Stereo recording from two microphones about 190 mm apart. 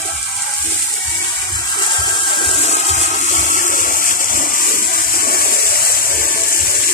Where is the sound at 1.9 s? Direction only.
25° left (ahead or behind).